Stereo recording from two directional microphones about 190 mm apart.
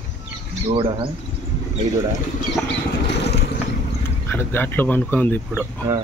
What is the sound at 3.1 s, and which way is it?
Vehicle, 60° left (ahead or behind).